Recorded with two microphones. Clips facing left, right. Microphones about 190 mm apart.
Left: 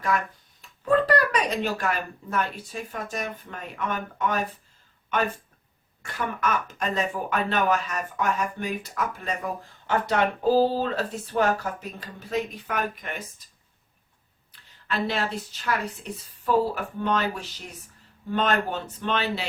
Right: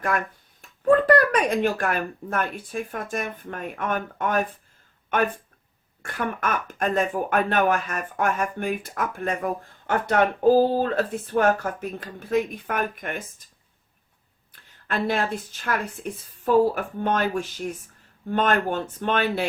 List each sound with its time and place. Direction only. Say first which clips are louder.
0.6 s speech: right 4 dB; 50° right (ahead or behind)
14.5 s speech: right 2 dB; 50° right (ahead or behind)